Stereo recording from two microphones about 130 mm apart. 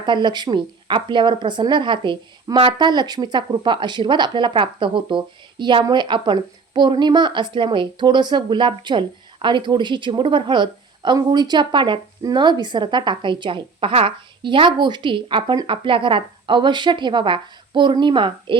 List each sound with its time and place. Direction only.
0.0 s speech: 35° right (ahead or behind)